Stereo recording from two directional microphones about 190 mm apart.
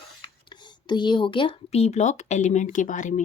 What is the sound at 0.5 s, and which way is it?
Speech, 25° left (ahead or behind).